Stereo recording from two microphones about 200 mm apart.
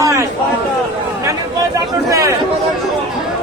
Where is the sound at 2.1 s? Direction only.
15° right (ahead or behind).